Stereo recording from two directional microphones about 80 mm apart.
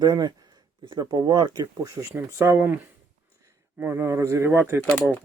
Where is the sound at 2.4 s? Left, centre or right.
Right.